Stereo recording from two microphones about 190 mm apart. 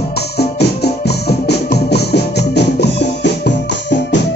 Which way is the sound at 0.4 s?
60° left (ahead or behind).